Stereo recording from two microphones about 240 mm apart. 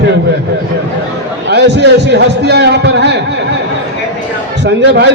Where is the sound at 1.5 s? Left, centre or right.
Right.